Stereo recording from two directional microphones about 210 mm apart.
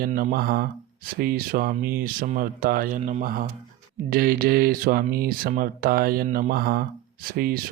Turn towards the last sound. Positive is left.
turn(degrees=-45)  # may be behind; listen again after turning